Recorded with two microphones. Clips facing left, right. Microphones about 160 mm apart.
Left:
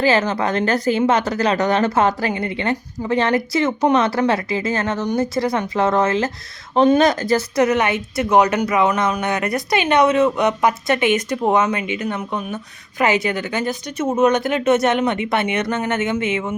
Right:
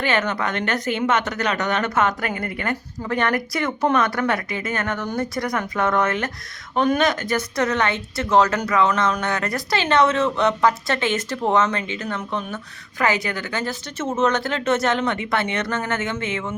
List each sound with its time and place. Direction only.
0.0 s a woman's voice: 30° left (ahead or behind)